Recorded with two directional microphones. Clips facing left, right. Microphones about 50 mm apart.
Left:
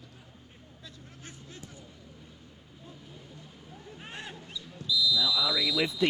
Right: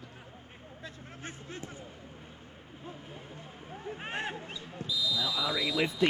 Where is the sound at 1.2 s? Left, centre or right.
Right.